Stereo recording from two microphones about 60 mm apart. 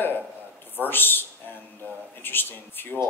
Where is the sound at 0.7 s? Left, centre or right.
Left.